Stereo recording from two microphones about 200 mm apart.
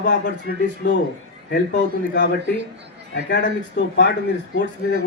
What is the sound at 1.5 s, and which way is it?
Speech, 60° left (ahead or behind).